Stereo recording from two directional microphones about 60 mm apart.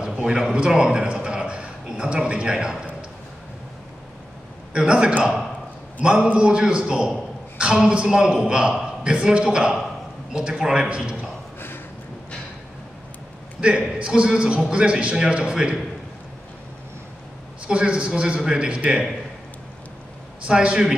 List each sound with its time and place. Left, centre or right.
0.0 s a man's voice: centre
4.7 s a man's voice: centre
13.6 s a man's voice: centre
17.6 s a man's voice: centre
20.4 s a man's voice: centre